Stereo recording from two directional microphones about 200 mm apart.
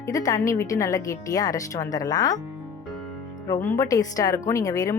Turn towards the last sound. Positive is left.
turn(degrees=15)  # may be behind; listen again after turning